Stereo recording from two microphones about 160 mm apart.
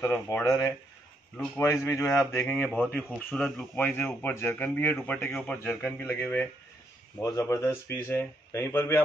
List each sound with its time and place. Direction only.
0.0 s speech: 15° left (ahead or behind)
1.6 s speech: 15° left (ahead or behind)